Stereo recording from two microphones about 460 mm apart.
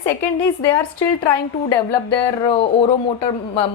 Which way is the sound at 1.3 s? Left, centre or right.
Left.